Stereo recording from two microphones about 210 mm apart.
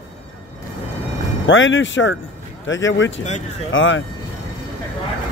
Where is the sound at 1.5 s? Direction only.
65° left (ahead or behind).